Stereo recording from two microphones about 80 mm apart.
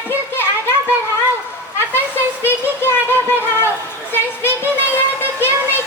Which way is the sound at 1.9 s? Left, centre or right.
Left.